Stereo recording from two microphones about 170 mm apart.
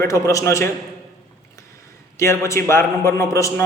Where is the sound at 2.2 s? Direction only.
15° left (ahead or behind).